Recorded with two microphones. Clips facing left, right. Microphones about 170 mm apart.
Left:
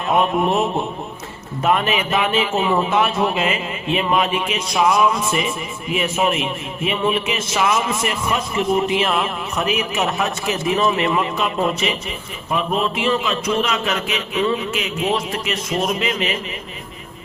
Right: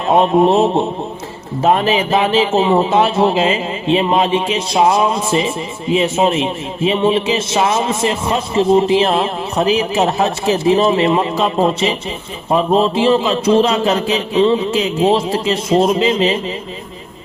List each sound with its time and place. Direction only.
0.0 s a man's voice: 30° right (ahead or behind)